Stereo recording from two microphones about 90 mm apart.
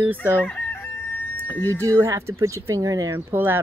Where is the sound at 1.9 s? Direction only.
35° right (ahead or behind).